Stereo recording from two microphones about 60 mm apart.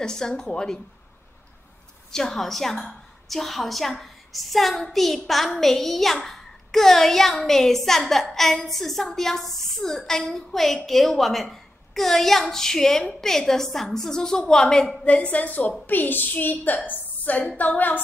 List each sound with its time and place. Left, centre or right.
0.0 s a woman's voice: centre
2.1 s a woman's voice: centre
3.9 s a sound: centre
4.8 s a woman's voice: centre
15.1 s a woman's voice: left